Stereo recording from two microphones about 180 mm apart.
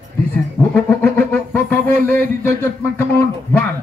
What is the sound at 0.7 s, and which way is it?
Music, 10° left (ahead or behind).